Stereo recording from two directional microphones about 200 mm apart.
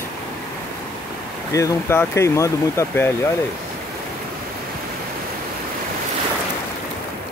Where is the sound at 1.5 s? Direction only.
15° left (ahead or behind).